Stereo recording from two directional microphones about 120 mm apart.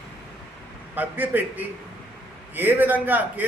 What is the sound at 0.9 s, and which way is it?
A man's voice, 15° right (ahead or behind).